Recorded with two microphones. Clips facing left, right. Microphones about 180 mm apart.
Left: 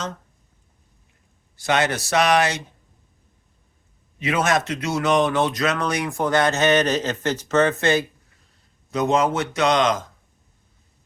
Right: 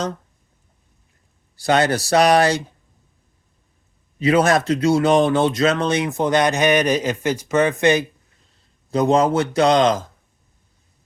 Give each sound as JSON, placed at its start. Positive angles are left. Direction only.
{"t": 1.5, "sound": "a man's voice", "side_deg": -35}
{"t": 4.2, "sound": "speech", "side_deg": -35}
{"t": 8.9, "sound": "a man's voice", "side_deg": -30}